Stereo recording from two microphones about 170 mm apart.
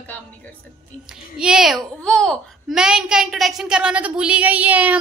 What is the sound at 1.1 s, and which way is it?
A child's voice, 5° right (ahead or behind).